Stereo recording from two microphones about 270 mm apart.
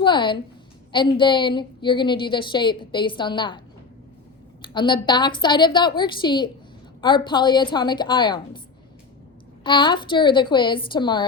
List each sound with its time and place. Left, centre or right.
0.0 s a woman's voice: centre
4.6 s a woman's voice: centre
9.6 s a woman's voice: centre